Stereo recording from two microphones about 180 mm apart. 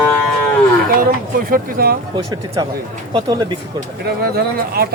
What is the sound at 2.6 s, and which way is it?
Speech, 20° right (ahead or behind).